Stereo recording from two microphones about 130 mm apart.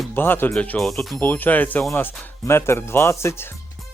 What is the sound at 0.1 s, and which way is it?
Speech, 15° left (ahead or behind).